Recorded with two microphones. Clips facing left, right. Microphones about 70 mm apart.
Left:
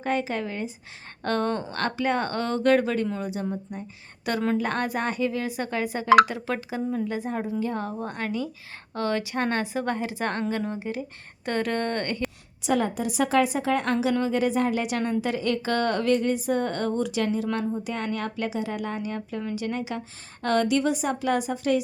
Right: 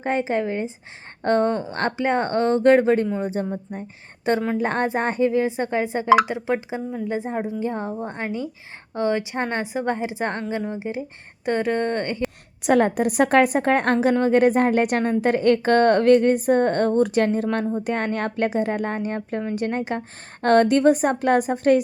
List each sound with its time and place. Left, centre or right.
0.0 s a woman's voice: right
4.5 s speech: right
12.6 s a woman's voice: right